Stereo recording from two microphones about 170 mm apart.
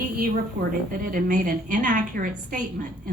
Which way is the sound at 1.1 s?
50° right (ahead or behind).